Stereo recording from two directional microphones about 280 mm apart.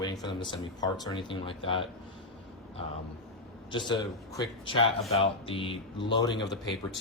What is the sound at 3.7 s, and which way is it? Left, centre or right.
Speech, centre.